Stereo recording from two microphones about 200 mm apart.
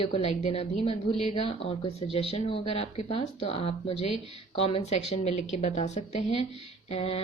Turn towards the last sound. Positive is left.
turn(degrees=30)  # may be behind; listen again after turning